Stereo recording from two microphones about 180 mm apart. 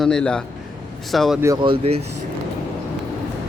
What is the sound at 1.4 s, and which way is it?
Speech, 25° right (ahead or behind).